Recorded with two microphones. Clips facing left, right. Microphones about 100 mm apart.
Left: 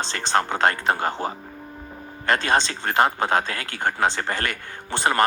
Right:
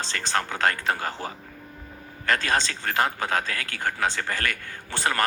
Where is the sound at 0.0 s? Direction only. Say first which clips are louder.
Left 5 dB; 25° left (ahead or behind).